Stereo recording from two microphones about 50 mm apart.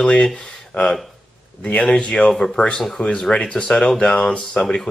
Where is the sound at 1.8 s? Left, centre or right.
Centre.